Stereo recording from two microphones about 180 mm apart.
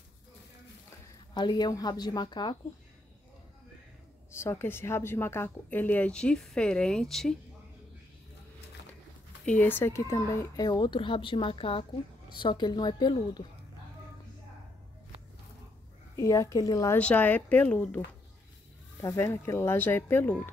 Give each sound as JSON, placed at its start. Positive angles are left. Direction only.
{"t": 1.3, "sound": "speech", "side_deg": 25}
{"t": 4.3, "sound": "a woman's voice", "side_deg": 15}
{"t": 9.5, "sound": "speech", "side_deg": 10}
{"t": 16.2, "sound": "a woman's voice", "side_deg": 15}